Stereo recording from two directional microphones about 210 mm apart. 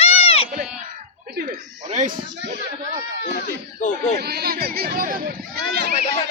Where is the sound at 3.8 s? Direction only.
35° left (ahead or behind).